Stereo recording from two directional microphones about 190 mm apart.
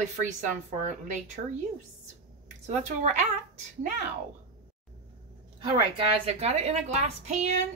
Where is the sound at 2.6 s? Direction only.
40° right (ahead or behind).